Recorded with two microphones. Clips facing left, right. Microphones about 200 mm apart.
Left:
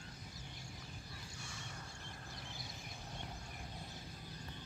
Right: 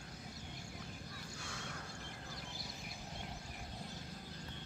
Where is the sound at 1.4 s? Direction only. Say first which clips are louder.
Right 5 dB; 70° right (ahead or behind).